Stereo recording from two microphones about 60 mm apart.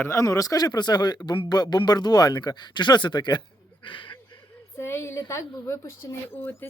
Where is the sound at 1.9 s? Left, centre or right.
Left.